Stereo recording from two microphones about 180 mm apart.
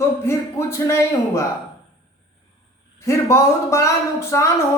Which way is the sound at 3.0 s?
15° left (ahead or behind).